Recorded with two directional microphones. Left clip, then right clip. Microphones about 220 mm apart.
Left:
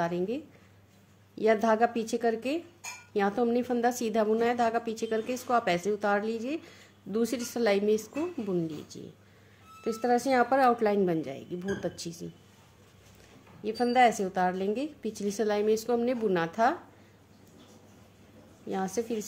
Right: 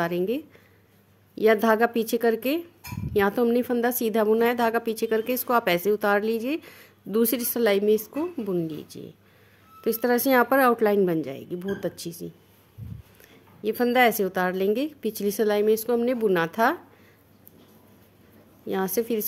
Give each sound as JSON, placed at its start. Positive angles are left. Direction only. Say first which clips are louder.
{"t": 0.0, "sound": "a woman's voice", "louder": "right 5 dB", "side_deg": -40}
{"t": 13.6, "sound": "a woman's voice", "louder": "right 3 dB", "side_deg": -40}
{"t": 18.7, "sound": "a woman's voice", "louder": "right 6 dB", "side_deg": -40}